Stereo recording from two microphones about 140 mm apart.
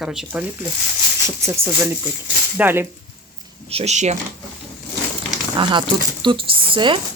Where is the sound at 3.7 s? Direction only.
50° right (ahead or behind).